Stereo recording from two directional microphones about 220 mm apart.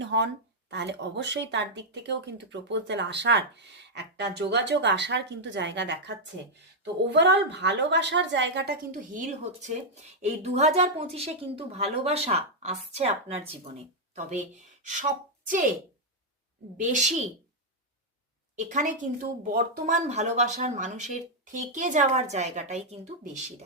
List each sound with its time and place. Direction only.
0.0 s a sound: 55° right (ahead or behind)
0.7 s a woman's voice: 50° right (ahead or behind); by 15.0 s 35° right (ahead or behind)
16.7 s a woman's voice: 35° right (ahead or behind)
18.5 s a woman's voice: 35° right (ahead or behind)